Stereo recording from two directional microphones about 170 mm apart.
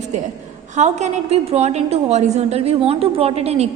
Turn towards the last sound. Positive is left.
turn(degrees=-35)  # may be behind; listen again after turning